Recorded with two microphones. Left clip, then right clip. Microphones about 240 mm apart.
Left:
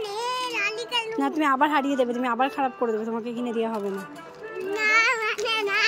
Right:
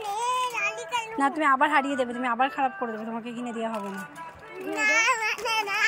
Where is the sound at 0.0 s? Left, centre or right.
Centre.